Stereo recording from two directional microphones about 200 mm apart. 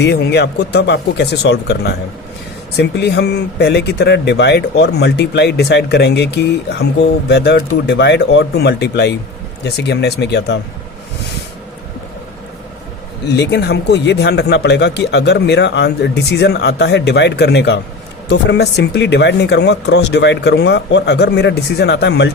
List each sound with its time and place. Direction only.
0.0 s speech: 55° left (ahead or behind)
13.2 s speech: 60° left (ahead or behind)